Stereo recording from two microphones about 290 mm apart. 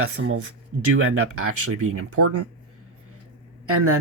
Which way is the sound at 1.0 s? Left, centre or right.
Right.